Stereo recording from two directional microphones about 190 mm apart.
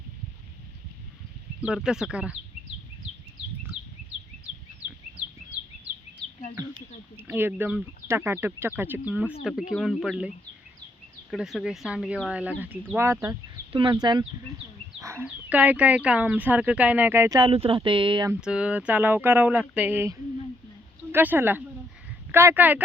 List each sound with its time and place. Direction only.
1.6 s speech: 5° right (ahead or behind)
7.2 s speech: 10° right (ahead or behind)
13.7 s speech: 25° right (ahead or behind)
17.5 s speech: 30° right (ahead or behind)
18.3 s speech: 5° right (ahead or behind)